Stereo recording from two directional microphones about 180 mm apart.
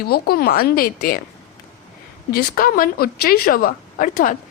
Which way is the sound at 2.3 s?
50° left (ahead or behind).